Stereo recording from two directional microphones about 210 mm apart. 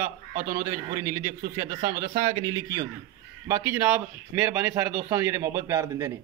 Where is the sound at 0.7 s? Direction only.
15° right (ahead or behind).